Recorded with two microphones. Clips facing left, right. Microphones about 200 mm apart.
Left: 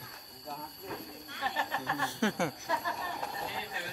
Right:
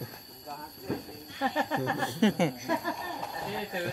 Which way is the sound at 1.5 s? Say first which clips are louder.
Right 8 dB; 50° right (ahead or behind).